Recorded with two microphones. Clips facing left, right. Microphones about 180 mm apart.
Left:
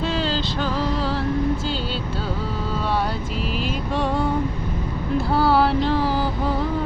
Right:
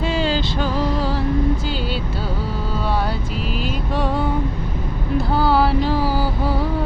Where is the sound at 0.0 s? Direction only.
10° right (ahead or behind).